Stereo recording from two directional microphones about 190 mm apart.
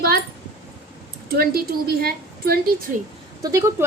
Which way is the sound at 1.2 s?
50° right (ahead or behind).